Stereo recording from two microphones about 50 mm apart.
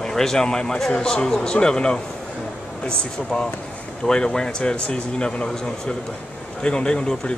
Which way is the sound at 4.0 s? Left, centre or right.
Centre.